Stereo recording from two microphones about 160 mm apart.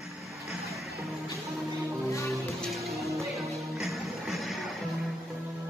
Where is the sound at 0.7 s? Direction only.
Centre (ahead or behind).